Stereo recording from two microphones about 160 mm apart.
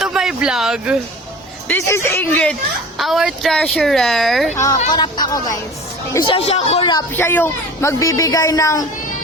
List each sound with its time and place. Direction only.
0.0 s a sound: 5° right (ahead or behind)
1.6 s speech: 15° left (ahead or behind)
4.5 s speech: 20° left (ahead or behind); by 6.8 s 40° left (ahead or behind)
7.1 s speech: 10° left (ahead or behind)